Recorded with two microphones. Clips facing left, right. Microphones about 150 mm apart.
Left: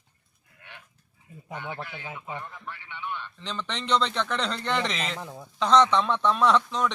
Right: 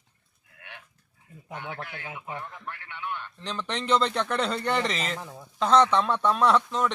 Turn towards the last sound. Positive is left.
turn(degrees=-5)  # may be behind; listen again after turning